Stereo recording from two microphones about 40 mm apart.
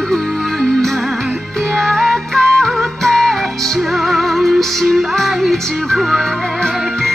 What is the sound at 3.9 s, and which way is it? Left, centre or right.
Music, centre.